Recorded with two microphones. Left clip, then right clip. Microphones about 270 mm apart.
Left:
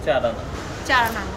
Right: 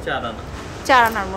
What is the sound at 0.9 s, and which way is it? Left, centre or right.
Speech, centre.